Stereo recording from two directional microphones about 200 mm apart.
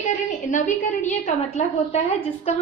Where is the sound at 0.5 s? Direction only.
35° left (ahead or behind).